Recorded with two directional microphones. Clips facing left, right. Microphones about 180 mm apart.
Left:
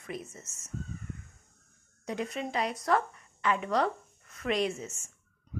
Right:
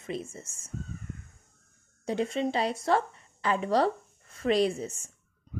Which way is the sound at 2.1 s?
30° right (ahead or behind).